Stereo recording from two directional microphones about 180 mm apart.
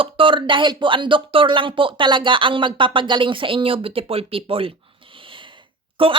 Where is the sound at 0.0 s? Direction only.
30° right (ahead or behind).